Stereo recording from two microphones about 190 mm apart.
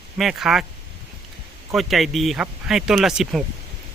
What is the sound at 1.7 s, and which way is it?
Speech, centre (ahead or behind).